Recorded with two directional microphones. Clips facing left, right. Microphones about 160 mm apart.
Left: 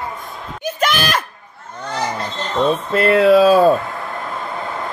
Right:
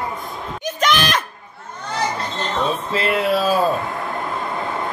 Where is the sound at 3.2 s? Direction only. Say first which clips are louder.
Left 10 dB; 80° left.